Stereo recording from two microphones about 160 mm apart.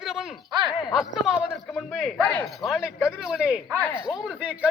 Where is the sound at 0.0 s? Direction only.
5° right (ahead or behind).